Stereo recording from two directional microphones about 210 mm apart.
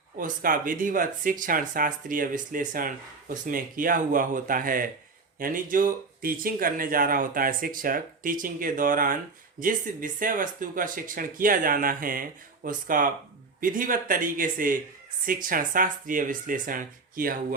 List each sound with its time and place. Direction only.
0.2 s speech: 40° right (ahead or behind)